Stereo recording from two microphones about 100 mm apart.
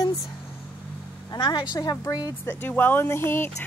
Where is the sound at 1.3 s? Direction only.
50° left (ahead or behind).